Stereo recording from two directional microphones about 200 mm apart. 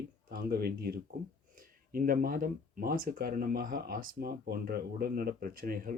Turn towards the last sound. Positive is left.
turn(degrees=-45)  # may be behind; listen again after turning